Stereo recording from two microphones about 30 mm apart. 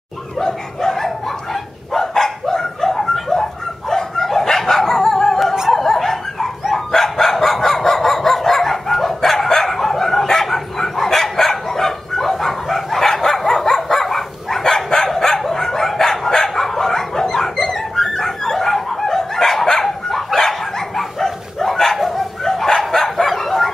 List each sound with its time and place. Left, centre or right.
0.4 s chicken: centre
1.5 s dog: centre
3.9 s bow-wow: centre
4.5 s dog: centre
22.4 s bow-wow: centre